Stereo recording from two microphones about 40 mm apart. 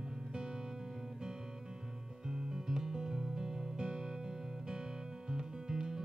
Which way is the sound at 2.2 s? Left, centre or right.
Centre.